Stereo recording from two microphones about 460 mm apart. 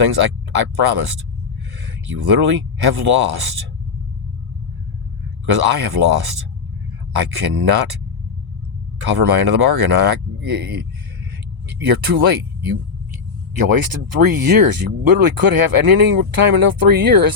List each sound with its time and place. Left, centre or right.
0.0 s speech: right
5.5 s speech: right
9.0 s speech: right
11.7 s speech: right
14.2 s speech: right